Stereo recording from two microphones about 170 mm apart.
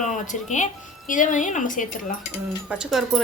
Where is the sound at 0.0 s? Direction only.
45° left (ahead or behind).